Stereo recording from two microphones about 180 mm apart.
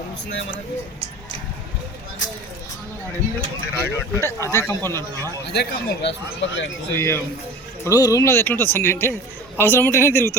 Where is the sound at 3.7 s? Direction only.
15° left (ahead or behind).